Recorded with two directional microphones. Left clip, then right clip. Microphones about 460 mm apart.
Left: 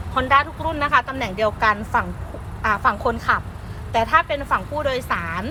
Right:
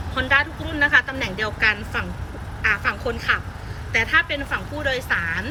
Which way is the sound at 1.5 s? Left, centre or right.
Left.